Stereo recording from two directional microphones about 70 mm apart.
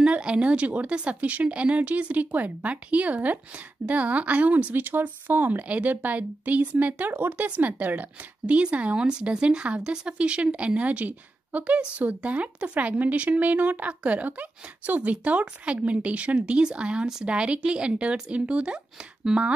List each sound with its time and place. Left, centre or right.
0.0 s speech: centre